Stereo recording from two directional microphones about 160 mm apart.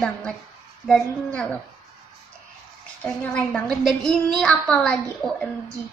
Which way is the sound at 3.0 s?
5° left (ahead or behind).